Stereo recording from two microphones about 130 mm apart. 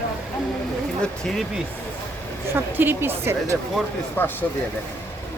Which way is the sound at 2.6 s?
15° right (ahead or behind).